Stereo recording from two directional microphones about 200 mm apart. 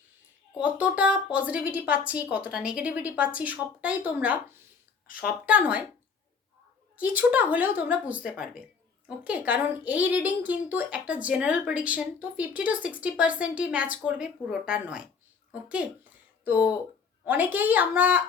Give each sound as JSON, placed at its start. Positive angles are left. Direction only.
{"t": 0.5, "sound": "a woman's voice", "side_deg": -5}
{"t": 6.9, "sound": "a woman's voice", "side_deg": -5}
{"t": 16.4, "sound": "a woman's voice", "side_deg": -10}